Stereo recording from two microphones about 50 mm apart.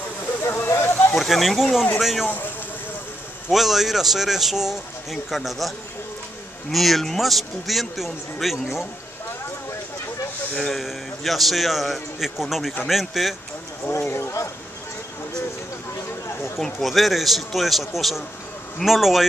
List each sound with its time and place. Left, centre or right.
0.7 s a sound: left
1.1 s speech: centre
2.2 s speech: left
3.4 s speech: centre
6.7 s speech: centre
10.6 s speech: centre
13.9 s speech: left
16.6 s speech: centre